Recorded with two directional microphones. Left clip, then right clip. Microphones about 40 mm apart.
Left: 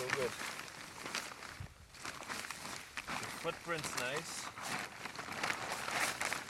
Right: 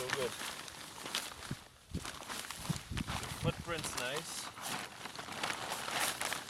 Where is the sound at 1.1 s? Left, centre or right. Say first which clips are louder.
Right 2 dB; right.